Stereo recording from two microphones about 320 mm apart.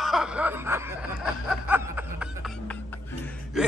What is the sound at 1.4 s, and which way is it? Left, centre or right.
Snicker, centre.